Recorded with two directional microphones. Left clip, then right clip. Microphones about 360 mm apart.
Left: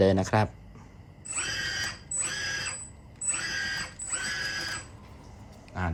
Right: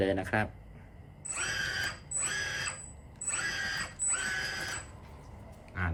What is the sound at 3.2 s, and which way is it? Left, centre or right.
Mechanisms, centre.